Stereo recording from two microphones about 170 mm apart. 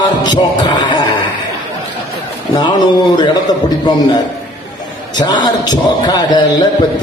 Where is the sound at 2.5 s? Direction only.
25° left (ahead or behind).